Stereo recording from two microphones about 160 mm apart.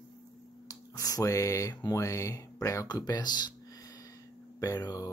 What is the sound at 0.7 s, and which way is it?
Speech, 20° left (ahead or behind).